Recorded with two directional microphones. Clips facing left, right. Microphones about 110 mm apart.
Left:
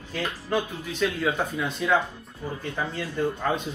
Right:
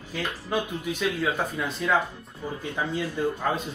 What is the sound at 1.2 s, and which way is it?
Speech, centre (ahead or behind).